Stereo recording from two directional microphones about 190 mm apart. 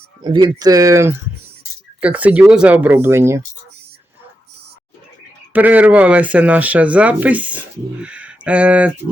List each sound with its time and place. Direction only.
0.2 s speech: 20° right (ahead or behind)
5.5 s speech: 10° right (ahead or behind)